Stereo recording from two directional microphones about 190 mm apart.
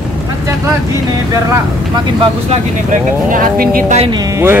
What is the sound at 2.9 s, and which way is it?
Speech, 45° right (ahead or behind).